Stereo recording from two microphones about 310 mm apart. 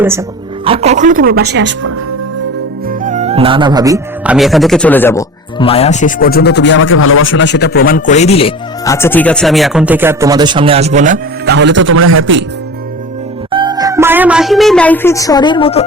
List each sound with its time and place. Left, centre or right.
0.0 s speech: centre; by 1.9 s right
3.0 s speech: right
13.5 s speech: centre